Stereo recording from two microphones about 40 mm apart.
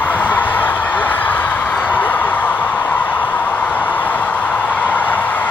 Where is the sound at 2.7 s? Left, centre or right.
Left.